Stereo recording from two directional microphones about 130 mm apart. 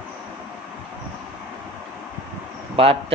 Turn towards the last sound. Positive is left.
turn(degrees=-45)  # may be behind; listen again after turning